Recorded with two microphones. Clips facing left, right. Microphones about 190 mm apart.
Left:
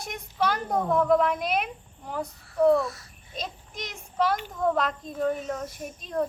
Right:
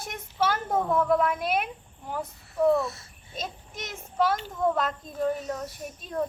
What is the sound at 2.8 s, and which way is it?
Speech, 25° right (ahead or behind).